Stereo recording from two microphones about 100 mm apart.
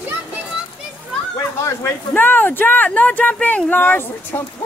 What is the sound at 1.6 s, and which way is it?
Speech, 20° left (ahead or behind).